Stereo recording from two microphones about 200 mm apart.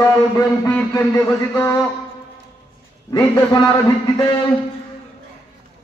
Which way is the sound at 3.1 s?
15° left (ahead or behind).